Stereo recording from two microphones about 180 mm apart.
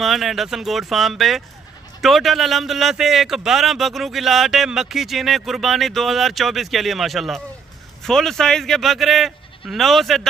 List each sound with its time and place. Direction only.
0.0 s speech: centre (ahead or behind)